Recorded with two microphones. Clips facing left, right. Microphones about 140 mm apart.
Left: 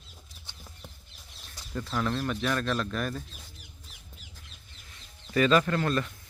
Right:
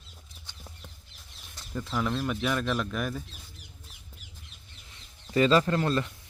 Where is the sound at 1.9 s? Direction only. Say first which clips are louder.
Even; 5° right (ahead or behind).